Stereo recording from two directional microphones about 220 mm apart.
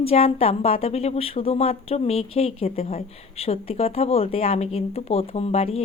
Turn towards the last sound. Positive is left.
turn(degrees=30)  # may be behind; listen again after turning